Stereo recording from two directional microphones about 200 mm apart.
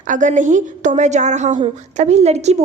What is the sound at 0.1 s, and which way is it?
A woman's voice, 40° right (ahead or behind).